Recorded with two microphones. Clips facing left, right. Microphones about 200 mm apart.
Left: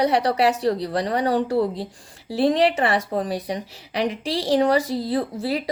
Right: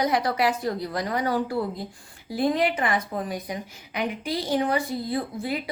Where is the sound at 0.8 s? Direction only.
30° left (ahead or behind).